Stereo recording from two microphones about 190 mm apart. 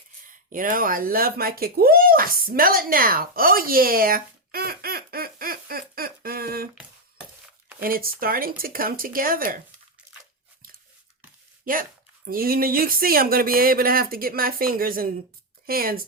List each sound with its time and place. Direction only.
0.3 s speech: 45° right (ahead or behind)
7.8 s speech: 50° right (ahead or behind)
11.6 s speech: 50° right (ahead or behind)